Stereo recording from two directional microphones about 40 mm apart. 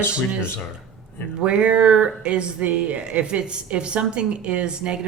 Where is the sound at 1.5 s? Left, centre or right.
Right.